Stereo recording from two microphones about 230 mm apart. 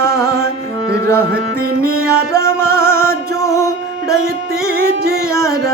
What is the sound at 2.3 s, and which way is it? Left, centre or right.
Music, centre.